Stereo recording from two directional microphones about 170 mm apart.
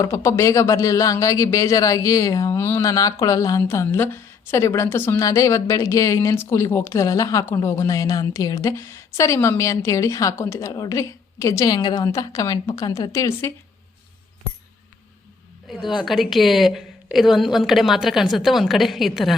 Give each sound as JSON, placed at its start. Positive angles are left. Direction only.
{"t": 0.0, "sound": "speech", "side_deg": 15}
{"t": 15.7, "sound": "a woman's voice", "side_deg": 0}